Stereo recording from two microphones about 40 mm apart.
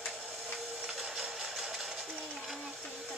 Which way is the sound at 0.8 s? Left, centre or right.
Centre.